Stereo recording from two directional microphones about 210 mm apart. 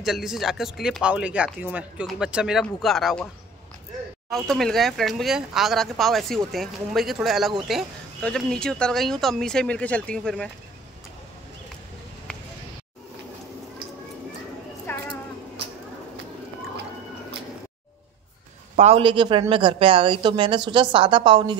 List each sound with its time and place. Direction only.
0.0 s speech: centre (ahead or behind)
4.3 s speech: centre (ahead or behind)
14.9 s a sound: 10° left (ahead or behind)
18.8 s speech: 30° right (ahead or behind)